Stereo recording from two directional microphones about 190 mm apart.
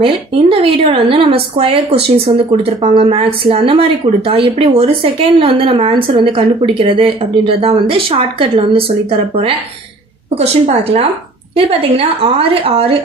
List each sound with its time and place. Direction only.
0.0 s a woman's voice: 30° right (ahead or behind)